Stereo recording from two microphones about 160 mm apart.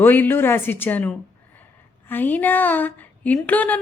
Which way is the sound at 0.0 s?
10° left (ahead or behind).